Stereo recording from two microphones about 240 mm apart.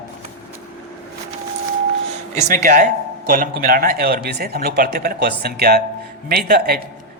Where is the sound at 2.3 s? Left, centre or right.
Right.